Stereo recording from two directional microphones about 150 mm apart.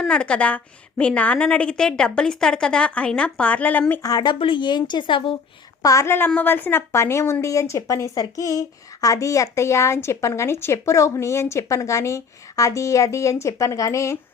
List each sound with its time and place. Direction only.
0.0 s a woman's voice: 5° left (ahead or behind)
4.0 s speech: 25° left (ahead or behind)
5.8 s a woman's voice: 20° left (ahead or behind)